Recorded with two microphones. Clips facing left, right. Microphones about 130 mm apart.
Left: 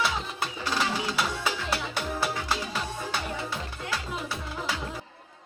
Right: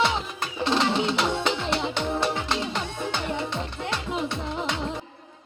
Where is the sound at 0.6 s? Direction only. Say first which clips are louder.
Right 7 dB; 25° right (ahead or behind).